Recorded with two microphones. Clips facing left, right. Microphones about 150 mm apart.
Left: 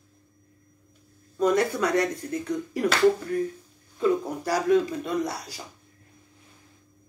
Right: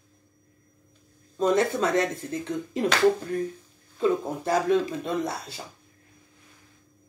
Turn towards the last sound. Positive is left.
turn(degrees=-25)  # may be behind; listen again after turning